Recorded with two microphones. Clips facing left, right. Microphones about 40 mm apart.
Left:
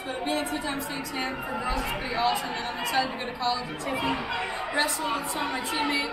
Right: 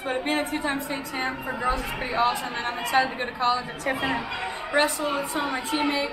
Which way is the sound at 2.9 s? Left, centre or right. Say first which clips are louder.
Right 5 dB; right.